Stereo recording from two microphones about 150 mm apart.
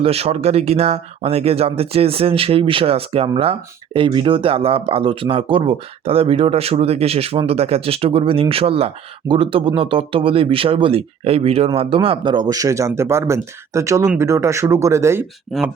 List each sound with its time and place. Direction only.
0.0 s speech: 45° right (ahead or behind); by 15.3 s 15° right (ahead or behind)